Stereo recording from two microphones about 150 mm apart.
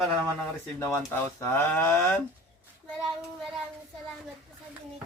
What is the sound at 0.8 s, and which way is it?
Speech, 20° left (ahead or behind).